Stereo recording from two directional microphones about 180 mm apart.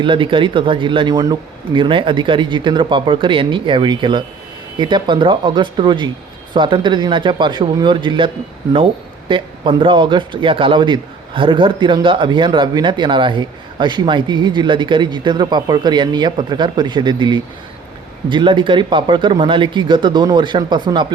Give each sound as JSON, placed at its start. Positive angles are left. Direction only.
{"t": 0.0, "sound": "speech", "side_deg": -30}
{"t": 9.3, "sound": "speech", "side_deg": -30}